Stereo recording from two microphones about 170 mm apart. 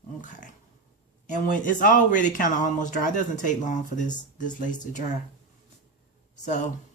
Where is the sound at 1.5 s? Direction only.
50° left (ahead or behind).